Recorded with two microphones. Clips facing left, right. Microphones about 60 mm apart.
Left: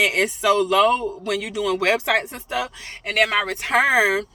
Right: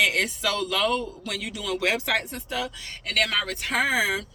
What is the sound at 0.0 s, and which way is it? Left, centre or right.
A woman's voice, left.